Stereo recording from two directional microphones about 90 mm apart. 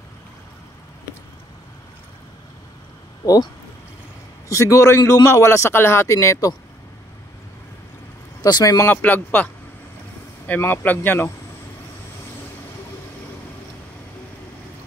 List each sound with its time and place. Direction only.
4.5 s speech: 35° left (ahead or behind)
8.4 s speech: 50° left (ahead or behind)
8.8 s speech: 20° left (ahead or behind)